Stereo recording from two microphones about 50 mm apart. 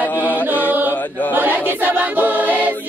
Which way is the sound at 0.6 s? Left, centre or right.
Right.